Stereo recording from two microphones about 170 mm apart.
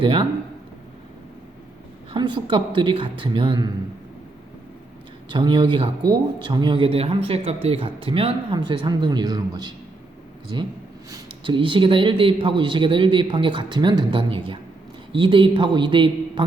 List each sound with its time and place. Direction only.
0.0 s a man's voice: 30° right (ahead or behind)
2.1 s a man's voice: 30° right (ahead or behind)
5.3 s a man's voice: 25° right (ahead or behind)
11.1 s a man's voice: 30° right (ahead or behind)